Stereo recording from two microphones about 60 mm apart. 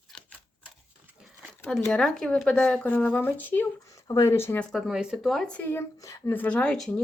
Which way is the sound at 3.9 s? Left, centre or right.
Left.